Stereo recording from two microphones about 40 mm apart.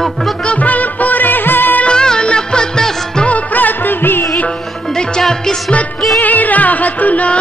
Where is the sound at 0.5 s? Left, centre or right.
Left.